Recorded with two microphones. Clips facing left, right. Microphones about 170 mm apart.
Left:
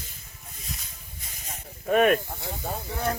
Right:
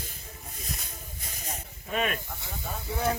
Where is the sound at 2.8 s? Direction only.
10° right (ahead or behind).